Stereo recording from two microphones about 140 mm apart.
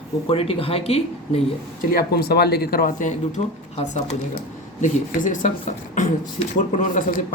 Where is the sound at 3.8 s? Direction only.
55° left (ahead or behind).